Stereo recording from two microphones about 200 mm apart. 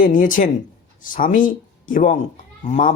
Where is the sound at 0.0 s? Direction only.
40° left (ahead or behind).